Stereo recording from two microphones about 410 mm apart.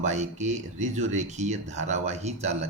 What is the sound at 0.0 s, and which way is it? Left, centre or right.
Speech, centre.